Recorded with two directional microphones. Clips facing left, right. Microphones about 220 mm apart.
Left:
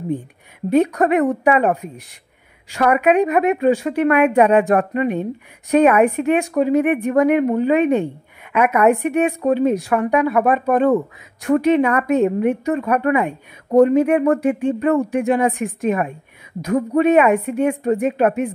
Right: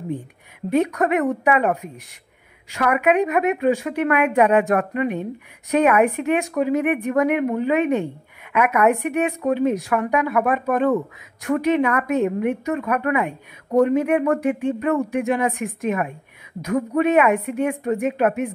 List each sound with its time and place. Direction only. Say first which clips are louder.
0.7 s a woman's voice: left 4 dB; 35° left (ahead or behind)